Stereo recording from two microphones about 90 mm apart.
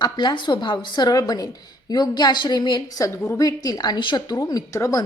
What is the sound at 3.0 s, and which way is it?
A woman's voice, 40° left (ahead or behind).